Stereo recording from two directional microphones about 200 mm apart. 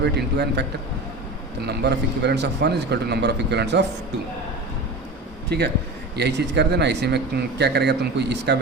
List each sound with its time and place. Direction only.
0.0 s a man's voice: 55° right (ahead or behind)
1.6 s a man's voice: 55° right (ahead or behind)
5.5 s a man's voice: 55° right (ahead or behind)